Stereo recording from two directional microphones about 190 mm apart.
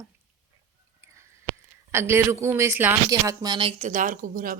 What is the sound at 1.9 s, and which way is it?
Speech, 15° right (ahead or behind).